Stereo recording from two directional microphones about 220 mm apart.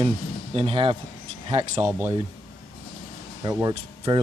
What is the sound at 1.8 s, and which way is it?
Speech, 10° right (ahead or behind).